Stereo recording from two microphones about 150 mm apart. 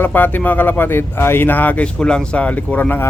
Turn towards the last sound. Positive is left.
turn(degrees=10)  # may be behind; listen again after turning